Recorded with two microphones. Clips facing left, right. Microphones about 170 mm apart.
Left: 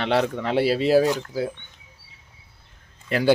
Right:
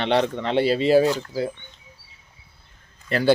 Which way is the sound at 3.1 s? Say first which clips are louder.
Even; 10° left (ahead or behind).